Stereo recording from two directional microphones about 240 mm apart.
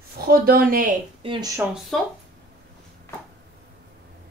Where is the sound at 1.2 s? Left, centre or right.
Centre.